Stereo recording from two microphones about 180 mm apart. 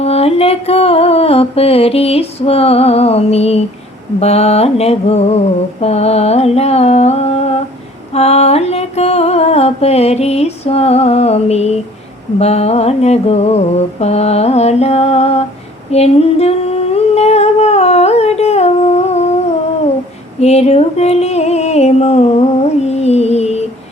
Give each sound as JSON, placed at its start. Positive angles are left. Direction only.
{"t": 0.0, "sound": "music", "side_deg": 35}
{"t": 15.9, "sound": "humming", "side_deg": 35}
{"t": 20.4, "sound": "a sound", "side_deg": 35}